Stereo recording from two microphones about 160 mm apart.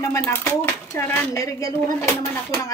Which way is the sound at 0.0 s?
15° left (ahead or behind).